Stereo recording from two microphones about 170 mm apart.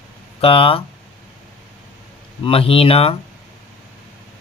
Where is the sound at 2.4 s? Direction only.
35° left (ahead or behind).